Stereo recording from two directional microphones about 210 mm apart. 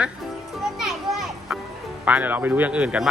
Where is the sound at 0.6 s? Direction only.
Centre (ahead or behind).